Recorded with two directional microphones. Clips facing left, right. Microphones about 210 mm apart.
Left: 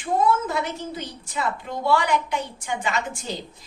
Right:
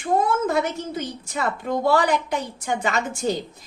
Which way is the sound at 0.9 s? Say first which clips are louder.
Right 3 dB; 45° right (ahead or behind).